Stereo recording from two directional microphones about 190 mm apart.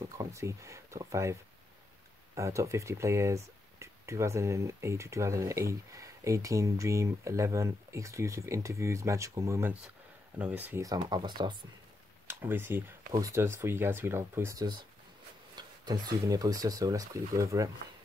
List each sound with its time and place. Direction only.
0.0 s speech: 15° right (ahead or behind)
12.3 s speech: 10° right (ahead or behind)